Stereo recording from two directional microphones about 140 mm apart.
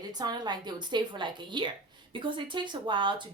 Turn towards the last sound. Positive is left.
turn(degrees=-35)  # may be behind; listen again after turning